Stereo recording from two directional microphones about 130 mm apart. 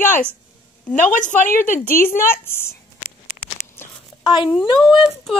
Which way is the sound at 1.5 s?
20° left (ahead or behind).